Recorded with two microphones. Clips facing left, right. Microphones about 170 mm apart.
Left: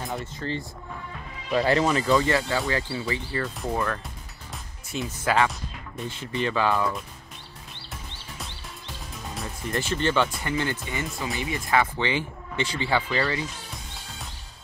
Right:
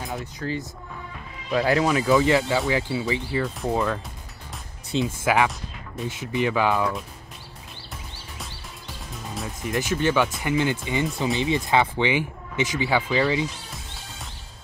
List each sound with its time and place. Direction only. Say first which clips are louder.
0.0 s speech: right 1 dB; centre (ahead or behind)
2.2 s speech: right 4 dB; 15° right (ahead or behind)
5.2 s speech: left 1 dB; 15° right (ahead or behind)
8.4 s music: even; centre (ahead or behind)
9.7 s speech: right 3 dB; 10° right (ahead or behind)